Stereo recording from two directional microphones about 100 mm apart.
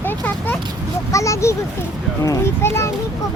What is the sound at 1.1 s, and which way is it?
A child's voice, 30° left (ahead or behind).